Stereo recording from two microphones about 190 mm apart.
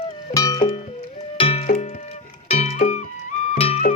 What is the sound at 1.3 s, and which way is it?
Music, 30° left (ahead or behind).